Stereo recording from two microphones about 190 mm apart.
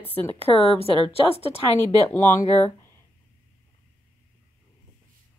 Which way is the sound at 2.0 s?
15° left (ahead or behind).